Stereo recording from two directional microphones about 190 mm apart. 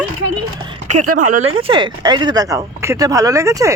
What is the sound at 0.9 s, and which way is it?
A child's voice, 40° right (ahead or behind).